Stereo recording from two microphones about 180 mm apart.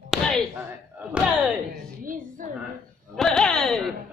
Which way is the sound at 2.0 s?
50° right (ahead or behind).